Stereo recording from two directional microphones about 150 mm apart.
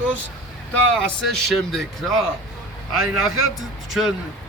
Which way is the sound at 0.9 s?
5° left (ahead or behind).